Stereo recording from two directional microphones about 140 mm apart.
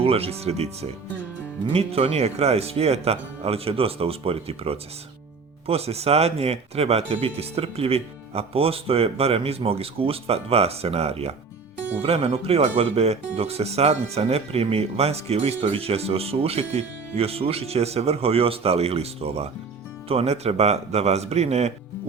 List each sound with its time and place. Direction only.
0.0 s speech: 45° right (ahead or behind)